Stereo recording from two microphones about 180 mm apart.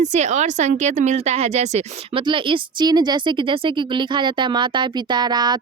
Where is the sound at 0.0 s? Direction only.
40° right (ahead or behind).